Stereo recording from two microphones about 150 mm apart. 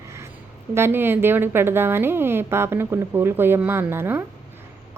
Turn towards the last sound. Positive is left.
turn(degrees=-15)  # may be behind; listen again after turning